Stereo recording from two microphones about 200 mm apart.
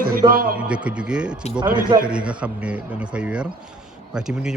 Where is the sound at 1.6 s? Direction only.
45° right (ahead or behind).